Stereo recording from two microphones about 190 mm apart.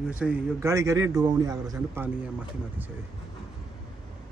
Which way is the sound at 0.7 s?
15° right (ahead or behind).